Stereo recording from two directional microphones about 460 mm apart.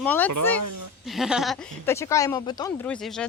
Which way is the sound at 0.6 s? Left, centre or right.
Right.